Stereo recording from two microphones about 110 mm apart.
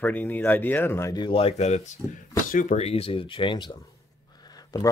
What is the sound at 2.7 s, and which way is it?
Speech, 65° left (ahead or behind).